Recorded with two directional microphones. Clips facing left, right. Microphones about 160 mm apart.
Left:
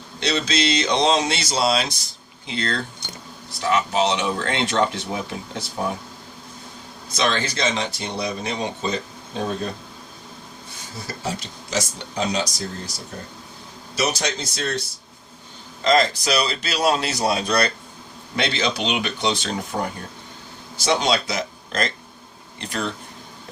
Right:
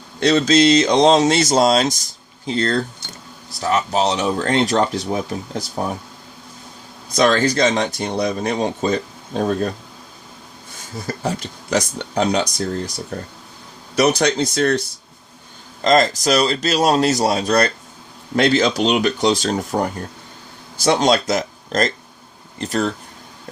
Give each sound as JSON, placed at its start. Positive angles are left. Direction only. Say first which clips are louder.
{"t": 0.2, "sound": "speech", "louder": "right 9 dB", "side_deg": -45}
{"t": 7.2, "sound": "speech", "louder": "right 8 dB", "side_deg": -45}
{"t": 11.0, "sound": "speech", "louder": "right 5 dB", "side_deg": -55}
{"t": 13.9, "sound": "speech", "louder": "right 8 dB", "side_deg": -60}
{"t": 15.8, "sound": "speech", "louder": "right 3 dB", "side_deg": -45}